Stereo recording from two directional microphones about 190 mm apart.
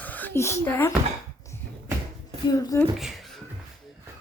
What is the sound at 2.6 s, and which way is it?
Speech, 20° left (ahead or behind).